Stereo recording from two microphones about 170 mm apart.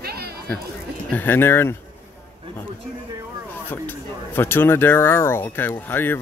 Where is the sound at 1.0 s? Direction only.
10° left (ahead or behind).